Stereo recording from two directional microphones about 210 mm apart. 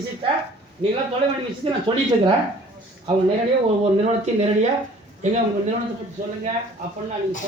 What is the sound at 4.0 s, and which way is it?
Speech, 30° right (ahead or behind).